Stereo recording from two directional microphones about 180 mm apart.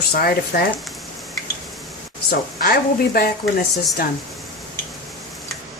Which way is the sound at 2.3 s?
60° left (ahead or behind).